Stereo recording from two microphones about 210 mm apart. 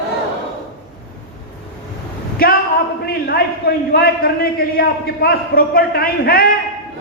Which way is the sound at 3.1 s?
45° left (ahead or behind).